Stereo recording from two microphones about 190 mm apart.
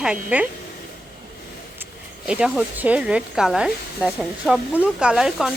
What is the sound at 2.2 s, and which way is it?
Speech, 5° right (ahead or behind).